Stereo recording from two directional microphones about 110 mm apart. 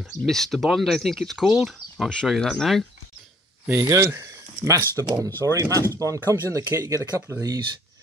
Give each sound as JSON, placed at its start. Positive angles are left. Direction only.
{"t": 0.3, "sound": "speech", "side_deg": 0}
{"t": 3.6, "sound": "speech", "side_deg": -25}